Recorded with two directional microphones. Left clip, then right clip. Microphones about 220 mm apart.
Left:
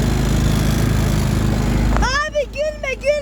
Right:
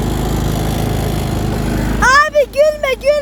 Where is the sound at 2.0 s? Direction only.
15° right (ahead or behind).